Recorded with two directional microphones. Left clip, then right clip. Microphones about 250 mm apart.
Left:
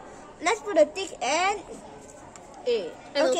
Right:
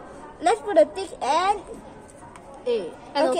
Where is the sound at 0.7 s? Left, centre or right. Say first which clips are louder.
Right 3 dB; centre.